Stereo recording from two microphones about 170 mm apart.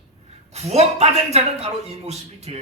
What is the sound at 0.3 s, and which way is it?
Speech, 40° right (ahead or behind).